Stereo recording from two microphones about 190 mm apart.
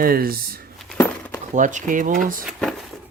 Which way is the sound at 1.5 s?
40° right (ahead or behind).